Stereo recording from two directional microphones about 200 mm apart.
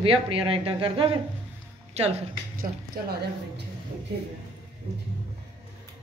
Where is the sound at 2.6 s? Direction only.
50° right (ahead or behind).